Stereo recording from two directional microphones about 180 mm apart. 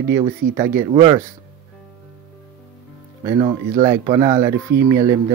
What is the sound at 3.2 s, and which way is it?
A man's voice, 20° right (ahead or behind).